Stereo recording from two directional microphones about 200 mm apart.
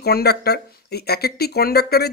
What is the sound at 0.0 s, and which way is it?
Speech, 50° left (ahead or behind).